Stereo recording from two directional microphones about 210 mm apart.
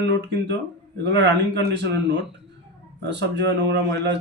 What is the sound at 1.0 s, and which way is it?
A man's voice, 55° right (ahead or behind).